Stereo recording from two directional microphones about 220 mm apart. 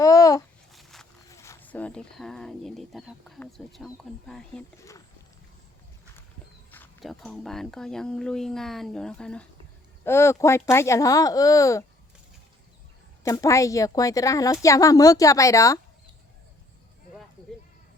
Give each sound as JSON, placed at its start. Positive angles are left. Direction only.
{"t": 0.0, "sound": "babbling", "side_deg": 15}
{"t": 0.7, "sound": "a sound", "side_deg": 0}
{"t": 1.3, "sound": "speech", "side_deg": 15}
{"t": 6.7, "sound": "speech", "side_deg": 10}
{"t": 13.2, "sound": "speech", "side_deg": 15}